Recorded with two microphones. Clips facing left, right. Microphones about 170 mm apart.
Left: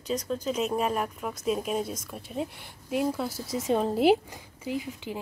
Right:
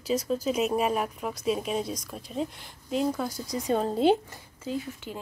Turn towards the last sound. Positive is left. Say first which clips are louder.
# left 1 dB
turn(degrees=15)  # may be behind; listen again after turning